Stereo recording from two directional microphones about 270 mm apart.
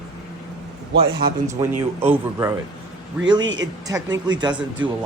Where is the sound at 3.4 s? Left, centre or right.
Right.